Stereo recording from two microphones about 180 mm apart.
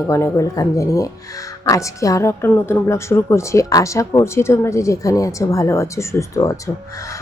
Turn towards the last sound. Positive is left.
turn(degrees=15)  # may be behind; listen again after turning